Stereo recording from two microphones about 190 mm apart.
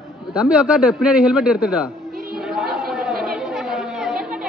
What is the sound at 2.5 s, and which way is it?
Chatter, centre (ahead or behind).